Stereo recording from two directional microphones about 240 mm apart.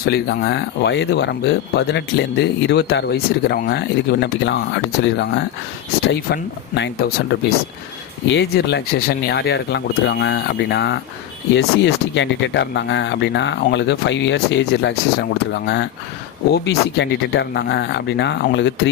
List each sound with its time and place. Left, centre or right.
0.0 s speech: left
8.3 s speech: left